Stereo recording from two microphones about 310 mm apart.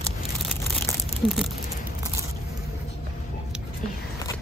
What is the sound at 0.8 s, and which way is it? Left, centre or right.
Crumpling, centre.